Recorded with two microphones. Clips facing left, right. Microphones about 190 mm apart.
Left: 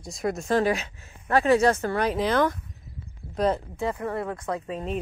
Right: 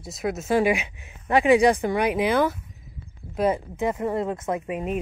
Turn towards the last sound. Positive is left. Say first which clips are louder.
# right 3 dB
turn(degrees=-10)  # may be behind; listen again after turning